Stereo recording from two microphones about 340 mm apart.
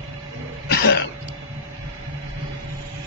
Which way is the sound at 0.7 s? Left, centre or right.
Left.